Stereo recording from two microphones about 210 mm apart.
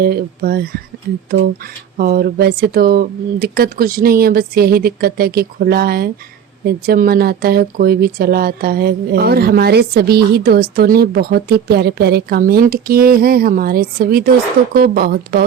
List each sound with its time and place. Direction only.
0.0 s speech: 45° right (ahead or behind)